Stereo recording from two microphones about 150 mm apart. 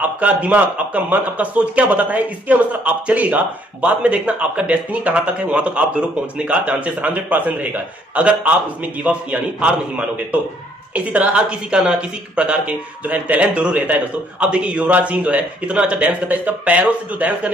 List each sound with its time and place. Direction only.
0.0 s a man's voice: 10° right (ahead or behind)